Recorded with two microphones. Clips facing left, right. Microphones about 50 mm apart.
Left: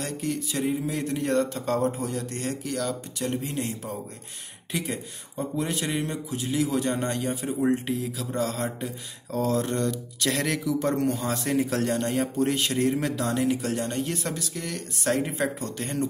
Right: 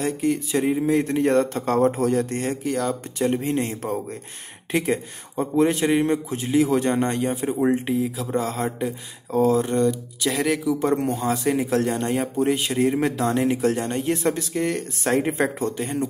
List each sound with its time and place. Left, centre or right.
0.0 s speech: right
2.2 s speech: right
3.3 s speech: right
7.0 s speech: right
9.6 s speech: centre
11.0 s speech: right
11.3 s speech: centre
13.3 s speech: right
15.8 s speech: centre